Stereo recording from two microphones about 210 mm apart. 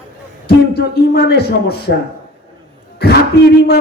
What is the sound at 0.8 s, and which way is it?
A man's voice, 50° left (ahead or behind).